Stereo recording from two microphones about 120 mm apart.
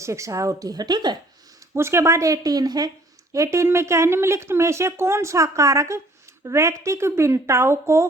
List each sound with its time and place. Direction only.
0.0 s speech: 25° right (ahead or behind)
1.7 s a woman's voice: 20° right (ahead or behind)